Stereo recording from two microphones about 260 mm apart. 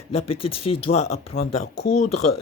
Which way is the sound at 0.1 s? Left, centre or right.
Left.